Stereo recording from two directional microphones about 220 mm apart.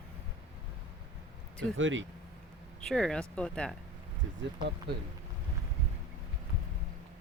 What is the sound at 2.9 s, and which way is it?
Speech, 5° left (ahead or behind).